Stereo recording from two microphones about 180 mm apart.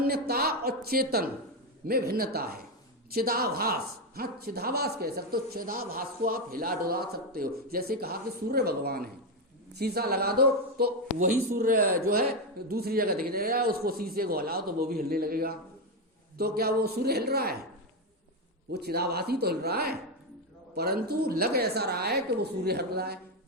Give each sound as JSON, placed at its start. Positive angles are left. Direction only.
{"t": 0.0, "sound": "speech", "side_deg": -60}
{"t": 18.7, "sound": "speech", "side_deg": -65}